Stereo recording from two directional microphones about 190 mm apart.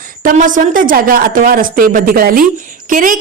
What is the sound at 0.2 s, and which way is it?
A woman's voice, 45° right (ahead or behind).